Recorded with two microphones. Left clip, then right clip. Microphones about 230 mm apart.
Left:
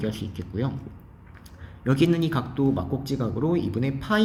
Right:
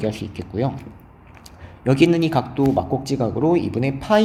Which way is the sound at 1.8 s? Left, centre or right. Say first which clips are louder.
Right 6 dB; left.